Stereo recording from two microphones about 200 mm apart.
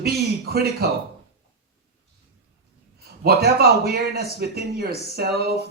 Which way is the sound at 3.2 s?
55° right (ahead or behind).